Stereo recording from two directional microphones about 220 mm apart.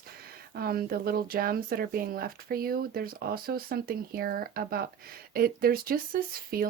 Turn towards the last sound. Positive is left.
turn(degrees=-40)  # may be behind; listen again after turning